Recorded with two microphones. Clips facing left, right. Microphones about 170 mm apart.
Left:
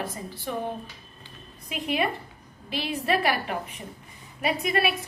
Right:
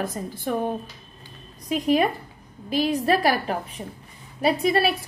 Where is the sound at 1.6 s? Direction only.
40° right (ahead or behind).